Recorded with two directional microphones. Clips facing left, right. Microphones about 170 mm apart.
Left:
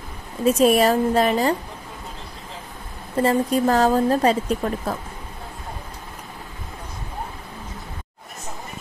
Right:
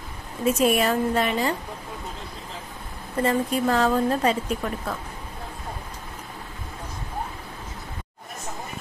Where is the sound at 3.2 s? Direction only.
40° left (ahead or behind).